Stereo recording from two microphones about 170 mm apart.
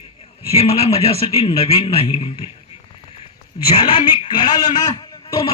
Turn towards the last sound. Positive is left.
turn(degrees=25)  # may be behind; listen again after turning